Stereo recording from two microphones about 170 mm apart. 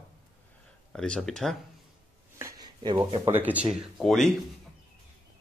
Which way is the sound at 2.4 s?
20° right (ahead or behind).